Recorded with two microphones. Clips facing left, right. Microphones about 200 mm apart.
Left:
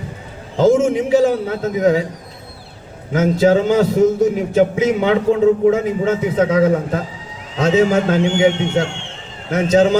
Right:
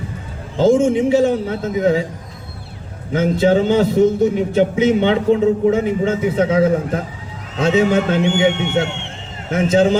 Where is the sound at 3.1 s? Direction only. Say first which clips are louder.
Left 1 dB; 30° right (ahead or behind).